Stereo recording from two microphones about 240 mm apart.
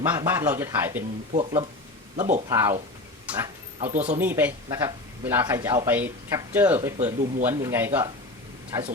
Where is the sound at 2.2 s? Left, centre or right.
Right.